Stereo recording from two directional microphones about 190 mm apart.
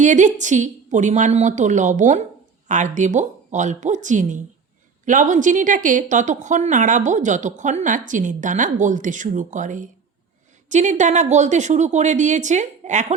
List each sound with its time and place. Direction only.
0.0 s a woman's voice: 40° right (ahead or behind)